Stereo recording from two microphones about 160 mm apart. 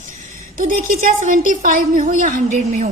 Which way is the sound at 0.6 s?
60° right (ahead or behind).